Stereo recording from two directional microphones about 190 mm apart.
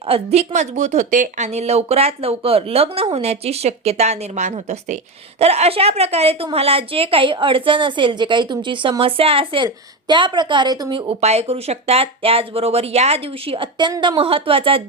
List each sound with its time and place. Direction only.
0.1 s a woman's voice: 35° right (ahead or behind)